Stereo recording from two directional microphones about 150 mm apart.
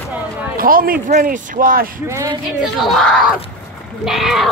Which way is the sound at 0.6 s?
70° right (ahead or behind).